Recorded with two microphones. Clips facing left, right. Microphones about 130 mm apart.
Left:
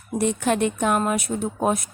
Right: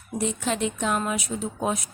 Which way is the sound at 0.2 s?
60° left (ahead or behind).